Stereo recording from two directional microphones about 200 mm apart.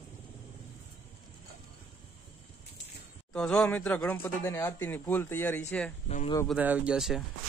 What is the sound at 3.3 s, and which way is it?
Speech, 5° left (ahead or behind).